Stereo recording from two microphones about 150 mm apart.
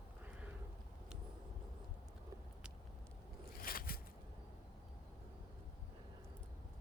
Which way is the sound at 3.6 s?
75° left (ahead or behind).